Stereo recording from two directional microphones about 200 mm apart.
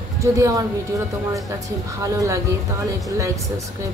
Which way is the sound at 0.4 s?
15° right (ahead or behind).